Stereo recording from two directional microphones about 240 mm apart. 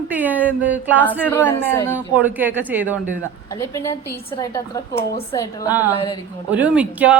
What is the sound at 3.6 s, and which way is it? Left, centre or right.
Speech, centre.